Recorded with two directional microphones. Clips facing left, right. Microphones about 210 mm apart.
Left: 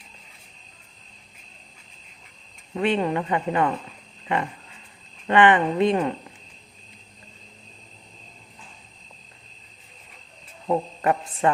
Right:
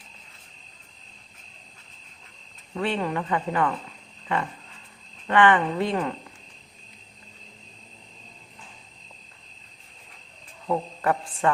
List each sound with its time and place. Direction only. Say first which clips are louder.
2.7 s speech: left 4 dB; 20° left (ahead or behind)
5.3 s speech: left 2 dB; 20° left (ahead or behind)
10.7 s speech: left 2 dB; 20° left (ahead or behind)